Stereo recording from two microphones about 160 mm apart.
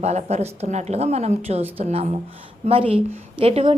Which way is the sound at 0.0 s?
45° right (ahead or behind).